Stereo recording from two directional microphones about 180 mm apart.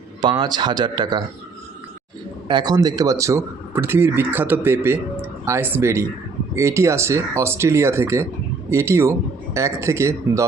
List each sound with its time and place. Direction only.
0.2 s speech: 25° right (ahead or behind)
2.5 s speech: 25° right (ahead or behind)